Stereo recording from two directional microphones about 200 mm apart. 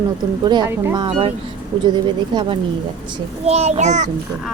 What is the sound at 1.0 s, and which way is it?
Speech, 25° right (ahead or behind).